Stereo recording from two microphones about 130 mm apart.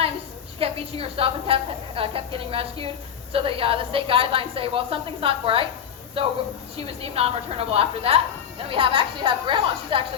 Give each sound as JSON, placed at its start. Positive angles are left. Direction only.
{"t": 0.6, "sound": "a woman's voice", "side_deg": -45}
{"t": 6.7, "sound": "a woman's voice", "side_deg": -50}